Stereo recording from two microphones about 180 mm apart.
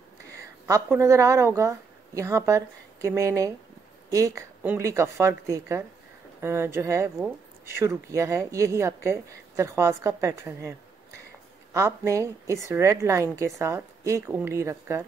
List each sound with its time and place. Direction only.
0.3 s speech: 15° right (ahead or behind)